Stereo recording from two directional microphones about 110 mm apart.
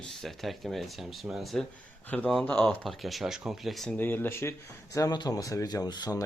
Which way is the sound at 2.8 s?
Centre (ahead or behind).